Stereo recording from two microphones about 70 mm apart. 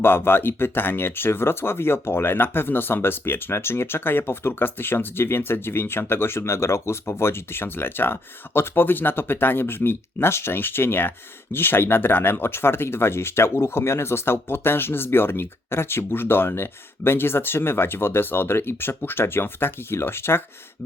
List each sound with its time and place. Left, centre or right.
0.0 s speech: left